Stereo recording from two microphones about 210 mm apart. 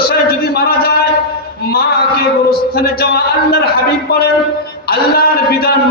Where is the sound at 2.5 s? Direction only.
45° left (ahead or behind).